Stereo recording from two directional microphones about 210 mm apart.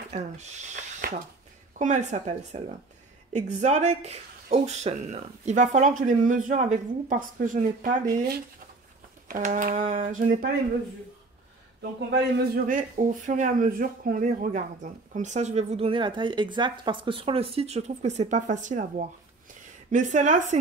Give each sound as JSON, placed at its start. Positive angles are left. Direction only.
{"t": 0.1, "sound": "a man's voice", "side_deg": -35}
{"t": 9.3, "sound": "a man's voice", "side_deg": -40}
{"t": 12.2, "sound": "a man's voice", "side_deg": -45}